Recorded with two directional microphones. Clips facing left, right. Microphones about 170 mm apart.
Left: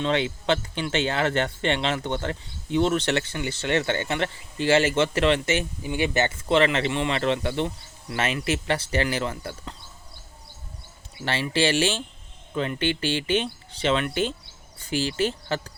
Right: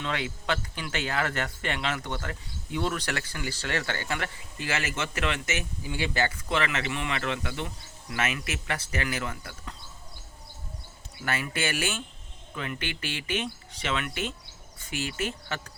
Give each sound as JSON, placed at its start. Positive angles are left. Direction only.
{"t": 0.0, "sound": "speech", "side_deg": 25}
{"t": 11.3, "sound": "speech", "side_deg": 30}